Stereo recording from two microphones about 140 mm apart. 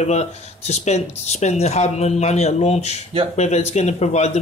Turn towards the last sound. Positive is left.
turn(degrees=55)  # may be behind; listen again after turning